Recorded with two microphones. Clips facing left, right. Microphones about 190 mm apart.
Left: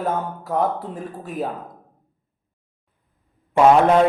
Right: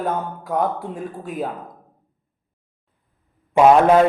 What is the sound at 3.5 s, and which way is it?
Speech, 10° right (ahead or behind).